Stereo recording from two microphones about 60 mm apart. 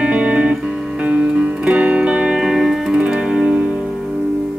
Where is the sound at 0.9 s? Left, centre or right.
Centre.